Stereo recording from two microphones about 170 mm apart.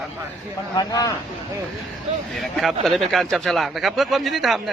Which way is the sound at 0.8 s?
20° left (ahead or behind).